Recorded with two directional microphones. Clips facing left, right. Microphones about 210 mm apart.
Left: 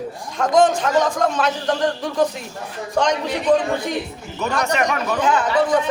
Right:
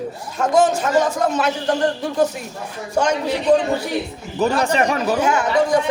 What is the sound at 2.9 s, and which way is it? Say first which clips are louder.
Speech: right 1 dB; 10° right (ahead or behind).